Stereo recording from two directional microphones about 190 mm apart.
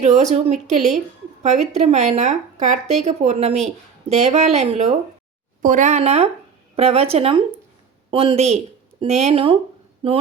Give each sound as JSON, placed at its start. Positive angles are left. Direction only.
{"t": 0.0, "sound": "a woman's voice", "side_deg": -40}